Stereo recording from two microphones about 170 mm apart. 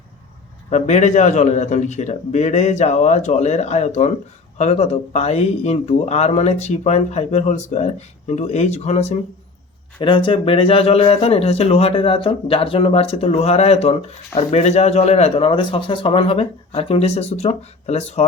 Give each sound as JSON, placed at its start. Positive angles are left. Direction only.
{"t": 0.7, "sound": "speech", "side_deg": 45}
{"t": 10.0, "sound": "speech", "side_deg": 30}